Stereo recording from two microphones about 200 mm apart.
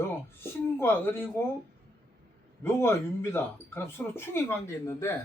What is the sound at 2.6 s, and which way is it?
A man's voice, 10° left (ahead or behind).